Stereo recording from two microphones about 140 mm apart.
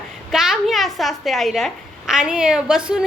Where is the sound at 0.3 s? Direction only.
5° right (ahead or behind).